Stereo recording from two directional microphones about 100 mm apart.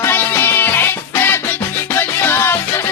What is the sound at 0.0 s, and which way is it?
Music, 20° left (ahead or behind).